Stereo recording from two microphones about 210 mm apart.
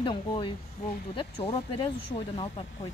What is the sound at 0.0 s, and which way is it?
Speech, 25° left (ahead or behind).